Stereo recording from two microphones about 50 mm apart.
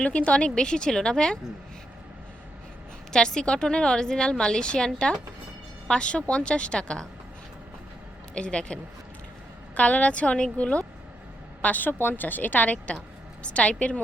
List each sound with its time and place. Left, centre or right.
0.0 s a woman's voice: left
3.1 s a woman's voice: centre
5.9 s speech: centre
8.4 s speech: centre
11.6 s a woman's voice: left